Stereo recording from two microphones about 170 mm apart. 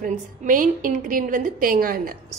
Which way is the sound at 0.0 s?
55° right (ahead or behind).